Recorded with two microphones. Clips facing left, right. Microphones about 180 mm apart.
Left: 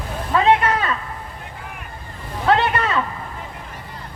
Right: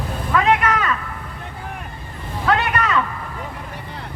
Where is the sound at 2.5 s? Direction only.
30° left (ahead or behind).